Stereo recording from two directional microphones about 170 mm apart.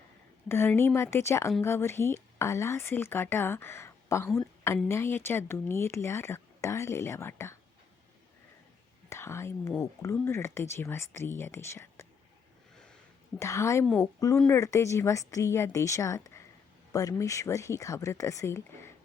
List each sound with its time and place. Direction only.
0.4 s a woman's voice: 15° left (ahead or behind)
9.0 s speech: 15° left (ahead or behind)
13.4 s speech: 15° left (ahead or behind)
13.8 s speech: 5° left (ahead or behind)